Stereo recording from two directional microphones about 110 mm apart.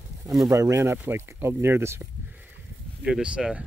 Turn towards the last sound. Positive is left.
turn(degrees=-10)  # may be behind; listen again after turning